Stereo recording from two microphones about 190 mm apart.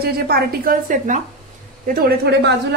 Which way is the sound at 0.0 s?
55° right (ahead or behind).